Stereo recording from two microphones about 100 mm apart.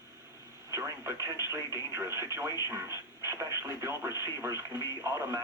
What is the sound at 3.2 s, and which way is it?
Radio, 30° right (ahead or behind).